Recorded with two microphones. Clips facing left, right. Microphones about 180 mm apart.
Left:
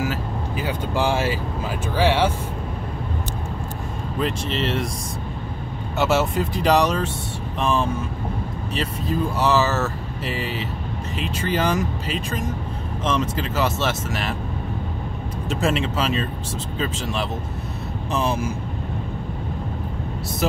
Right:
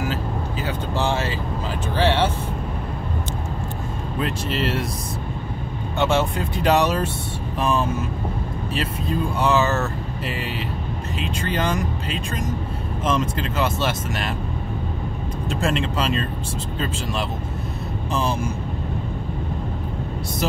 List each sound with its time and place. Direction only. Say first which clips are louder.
0.0 s vehicle: even; 10° left (ahead or behind)
2.0 s speech: left 1 dB; 10° left (ahead or behind)
4.2 s speech: left 1 dB; centre (ahead or behind)
5.9 s speech: left 1 dB; 5° left (ahead or behind)
15.5 s speech: left 1 dB; 5° left (ahead or behind)
18.1 s speech: left 1 dB; centre (ahead or behind)